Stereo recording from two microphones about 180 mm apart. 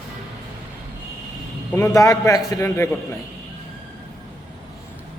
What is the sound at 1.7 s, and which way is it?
A man's voice, 15° left (ahead or behind).